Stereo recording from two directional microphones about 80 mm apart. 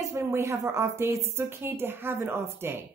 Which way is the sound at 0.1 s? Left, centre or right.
Right.